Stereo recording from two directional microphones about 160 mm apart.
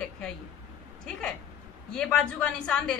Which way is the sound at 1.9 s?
5° left (ahead or behind).